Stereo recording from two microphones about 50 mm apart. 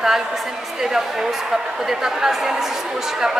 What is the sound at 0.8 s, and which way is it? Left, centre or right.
A woman's voice, centre.